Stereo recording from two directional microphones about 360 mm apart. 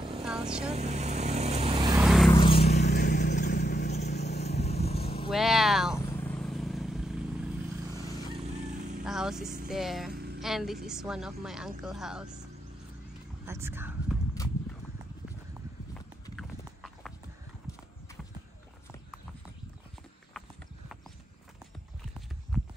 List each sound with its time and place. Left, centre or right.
0.2 s vehicle: centre
0.7 s vehicle: centre
2.3 s vehicle: centre
2.8 s vehicle: left
5.3 s vehicle: centre
7.9 s vehicle: centre
9.0 s vehicle: centre
9.7 s a woman's voice: centre
13.5 s speech: centre
16.3 s clip-clop: centre
22.5 s clip-clop: centre